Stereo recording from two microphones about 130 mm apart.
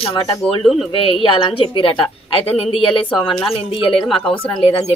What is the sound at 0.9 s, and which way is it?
A woman's voice, 45° left (ahead or behind).